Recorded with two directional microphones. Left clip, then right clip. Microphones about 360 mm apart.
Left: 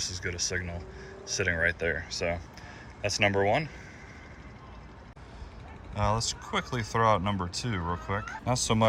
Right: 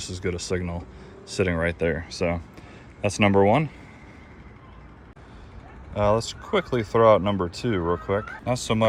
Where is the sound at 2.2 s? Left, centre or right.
Right.